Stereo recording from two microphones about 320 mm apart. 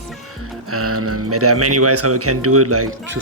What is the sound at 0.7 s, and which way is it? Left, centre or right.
Speech, right.